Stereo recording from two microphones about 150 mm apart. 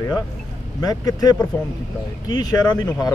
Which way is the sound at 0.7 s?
25° left (ahead or behind).